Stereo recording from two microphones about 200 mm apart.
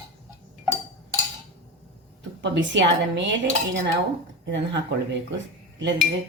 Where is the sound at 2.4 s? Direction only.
65° right (ahead or behind).